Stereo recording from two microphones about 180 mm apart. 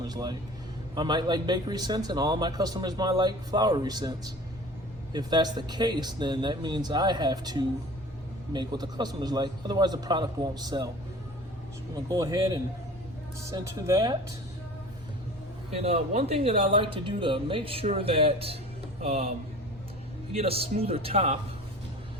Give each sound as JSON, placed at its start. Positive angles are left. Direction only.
{"t": 0.0, "sound": "a man's voice", "side_deg": -20}
{"t": 5.1, "sound": "speech", "side_deg": -25}
{"t": 11.9, "sound": "speech", "side_deg": -20}
{"t": 13.8, "sound": "speech", "side_deg": -20}
{"t": 15.7, "sound": "speech", "side_deg": -35}
{"t": 20.3, "sound": "speech", "side_deg": -35}